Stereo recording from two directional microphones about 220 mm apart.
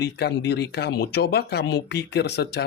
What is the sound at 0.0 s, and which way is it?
Speech, 50° left (ahead or behind).